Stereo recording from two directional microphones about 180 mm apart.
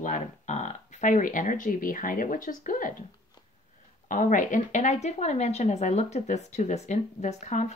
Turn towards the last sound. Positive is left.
turn(degrees=40)  # may be behind; listen again after turning